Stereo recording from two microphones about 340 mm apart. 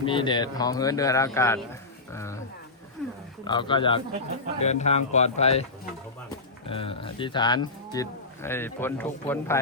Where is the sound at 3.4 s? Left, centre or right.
Centre.